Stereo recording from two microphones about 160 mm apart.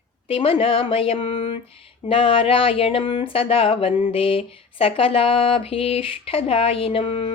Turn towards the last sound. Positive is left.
turn(degrees=35)  # may be behind; listen again after turning